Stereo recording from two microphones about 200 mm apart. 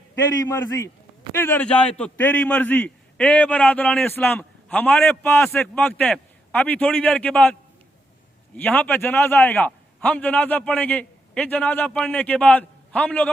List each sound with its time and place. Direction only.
0.4 s a man's voice: 15° left (ahead or behind)
8.5 s a man's voice: 10° left (ahead or behind)